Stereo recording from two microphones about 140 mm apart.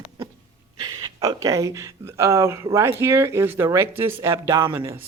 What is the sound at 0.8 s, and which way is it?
Speech, 30° right (ahead or behind).